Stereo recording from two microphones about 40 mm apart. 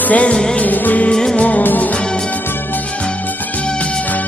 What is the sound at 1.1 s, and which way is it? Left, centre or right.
Music, centre.